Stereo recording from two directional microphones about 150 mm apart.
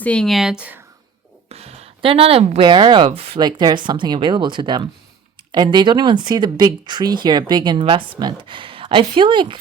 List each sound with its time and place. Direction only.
0.0 s speech: 5° left (ahead or behind)
1.5 s speech: 45° right (ahead or behind)
3.1 s speech: 40° right (ahead or behind)
3.4 s speech: 30° right (ahead or behind)